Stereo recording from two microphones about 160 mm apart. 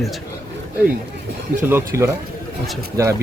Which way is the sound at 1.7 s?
15° right (ahead or behind).